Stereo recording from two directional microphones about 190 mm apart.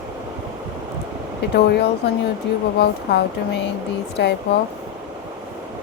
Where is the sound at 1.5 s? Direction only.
60° left (ahead or behind).